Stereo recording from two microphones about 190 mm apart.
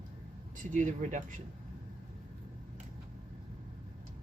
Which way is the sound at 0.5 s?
45° right (ahead or behind).